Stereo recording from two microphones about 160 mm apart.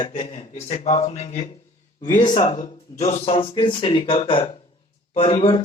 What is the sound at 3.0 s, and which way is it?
Speech, 45° left (ahead or behind).